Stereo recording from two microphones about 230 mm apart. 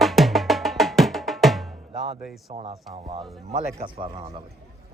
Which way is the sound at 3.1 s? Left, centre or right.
Right.